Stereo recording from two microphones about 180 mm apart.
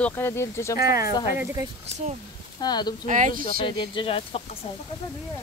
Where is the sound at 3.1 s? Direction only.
45° right (ahead or behind).